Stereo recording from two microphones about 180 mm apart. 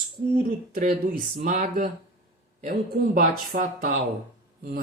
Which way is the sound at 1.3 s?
55° right (ahead or behind).